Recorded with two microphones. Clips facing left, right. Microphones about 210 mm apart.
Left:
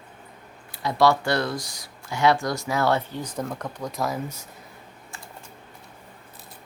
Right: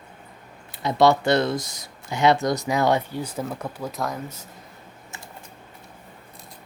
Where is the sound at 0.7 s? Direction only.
20° right (ahead or behind); by 4.4 s 5° left (ahead or behind).